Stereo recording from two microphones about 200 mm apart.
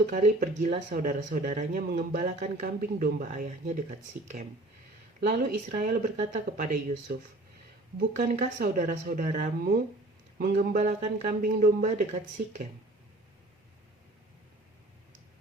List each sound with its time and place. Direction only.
0.1 s speech: 40° right (ahead or behind)
7.1 s speech: 50° right (ahead or behind)
7.9 s speech: 40° right (ahead or behind)